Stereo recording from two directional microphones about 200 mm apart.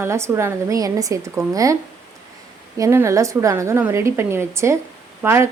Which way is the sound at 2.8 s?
15° right (ahead or behind).